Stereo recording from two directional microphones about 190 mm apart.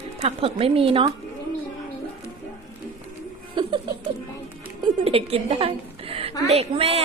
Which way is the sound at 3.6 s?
25° right (ahead or behind).